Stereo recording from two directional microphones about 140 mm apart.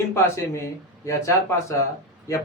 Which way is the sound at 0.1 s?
20° left (ahead or behind).